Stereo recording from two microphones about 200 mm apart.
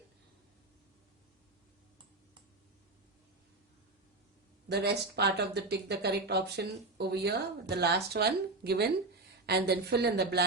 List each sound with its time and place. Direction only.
4.7 s speech: 55° right (ahead or behind)